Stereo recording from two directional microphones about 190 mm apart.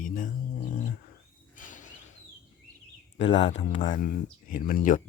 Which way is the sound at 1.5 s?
45° left (ahead or behind).